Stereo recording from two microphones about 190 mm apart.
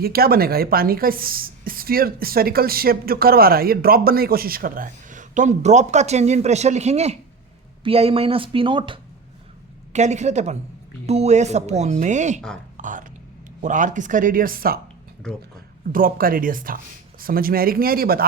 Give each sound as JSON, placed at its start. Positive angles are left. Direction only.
{"t": 0.0, "sound": "speech", "side_deg": -55}
{"t": 9.9, "sound": "speech", "side_deg": -35}
{"t": 12.7, "sound": "a sound", "side_deg": -40}
{"t": 13.6, "sound": "speech", "side_deg": -40}
{"t": 15.9, "sound": "speech", "side_deg": -50}